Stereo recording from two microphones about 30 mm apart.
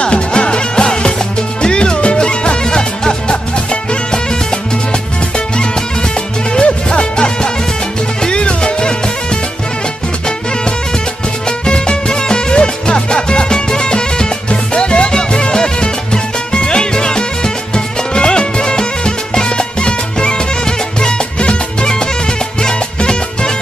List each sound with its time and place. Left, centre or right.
0.0 s music: left
6.5 s music: left
11.4 s music: left
21.4 s music: left